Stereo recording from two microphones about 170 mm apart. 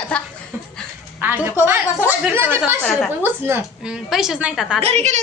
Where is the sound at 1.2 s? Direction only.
10° right (ahead or behind).